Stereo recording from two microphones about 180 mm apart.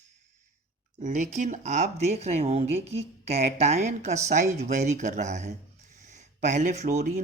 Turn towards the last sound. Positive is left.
turn(degrees=-45)  # may be behind; listen again after turning